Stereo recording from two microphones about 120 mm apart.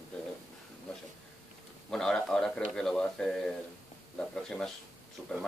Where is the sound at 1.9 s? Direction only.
5° left (ahead or behind).